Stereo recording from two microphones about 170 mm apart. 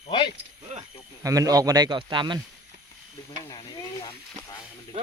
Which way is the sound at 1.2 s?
20° right (ahead or behind).